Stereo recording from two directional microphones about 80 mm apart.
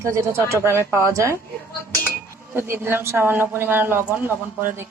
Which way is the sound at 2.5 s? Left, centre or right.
Right.